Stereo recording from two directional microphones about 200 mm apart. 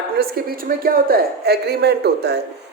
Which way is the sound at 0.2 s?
50° right (ahead or behind).